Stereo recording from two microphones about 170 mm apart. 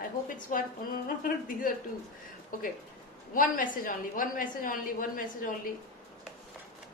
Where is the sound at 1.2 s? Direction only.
55° left (ahead or behind).